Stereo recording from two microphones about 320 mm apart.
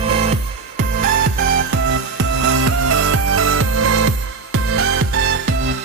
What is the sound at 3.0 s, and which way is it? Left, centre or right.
Music, right.